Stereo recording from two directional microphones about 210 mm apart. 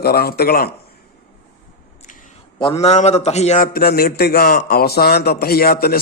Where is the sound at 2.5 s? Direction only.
25° left (ahead or behind).